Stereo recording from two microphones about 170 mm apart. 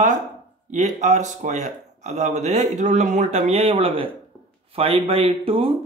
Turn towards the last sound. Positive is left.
turn(degrees=-35)  # may be behind; listen again after turning